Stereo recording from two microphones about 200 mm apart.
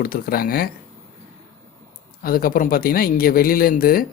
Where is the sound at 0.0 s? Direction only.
45° left (ahead or behind).